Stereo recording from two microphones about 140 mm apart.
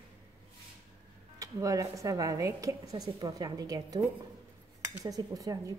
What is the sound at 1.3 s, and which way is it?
A woman's voice, 25° right (ahead or behind).